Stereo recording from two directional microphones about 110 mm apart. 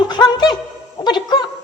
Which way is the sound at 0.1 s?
40° left (ahead or behind).